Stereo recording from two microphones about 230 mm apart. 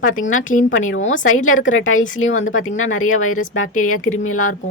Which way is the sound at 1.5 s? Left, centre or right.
Left.